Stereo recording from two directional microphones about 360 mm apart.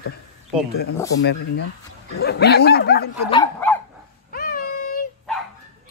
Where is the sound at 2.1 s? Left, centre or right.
Left.